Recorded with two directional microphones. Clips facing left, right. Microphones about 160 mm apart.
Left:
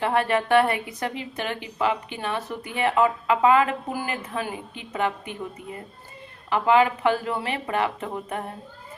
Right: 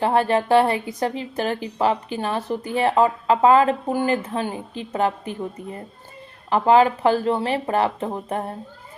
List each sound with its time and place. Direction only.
0.0 s a woman's voice: 35° right (ahead or behind)